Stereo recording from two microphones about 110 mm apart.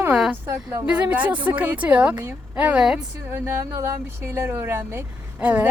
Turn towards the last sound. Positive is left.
turn(degrees=-15)  # may be behind; listen again after turning